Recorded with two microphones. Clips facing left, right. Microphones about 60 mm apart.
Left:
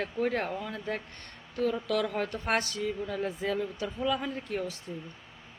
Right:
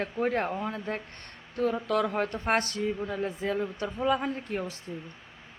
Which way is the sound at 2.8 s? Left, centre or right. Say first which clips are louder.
Right 2 dB; right.